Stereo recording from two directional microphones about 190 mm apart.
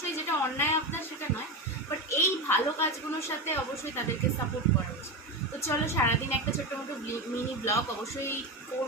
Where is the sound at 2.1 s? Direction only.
15° left (ahead or behind).